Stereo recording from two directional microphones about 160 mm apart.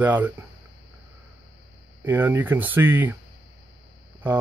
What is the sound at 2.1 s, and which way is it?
Speech, 10° right (ahead or behind).